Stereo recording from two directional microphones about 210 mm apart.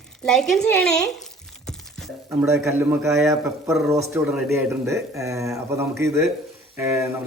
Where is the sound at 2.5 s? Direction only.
15° right (ahead or behind).